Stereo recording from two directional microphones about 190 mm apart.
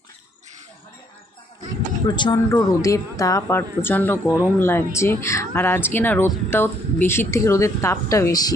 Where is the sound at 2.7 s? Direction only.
15° left (ahead or behind).